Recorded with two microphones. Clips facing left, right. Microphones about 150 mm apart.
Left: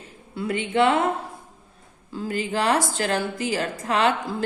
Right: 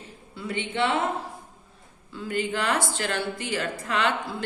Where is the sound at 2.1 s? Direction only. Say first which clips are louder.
Left 2 dB; 40° left (ahead or behind).